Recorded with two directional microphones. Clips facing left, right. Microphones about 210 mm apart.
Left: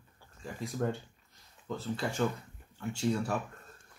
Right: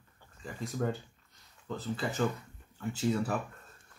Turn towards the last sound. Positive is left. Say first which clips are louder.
# right 1 dB
turn(degrees=-5)  # may be behind; listen again after turning